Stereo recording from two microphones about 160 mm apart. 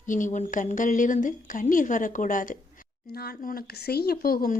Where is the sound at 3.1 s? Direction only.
75° left (ahead or behind).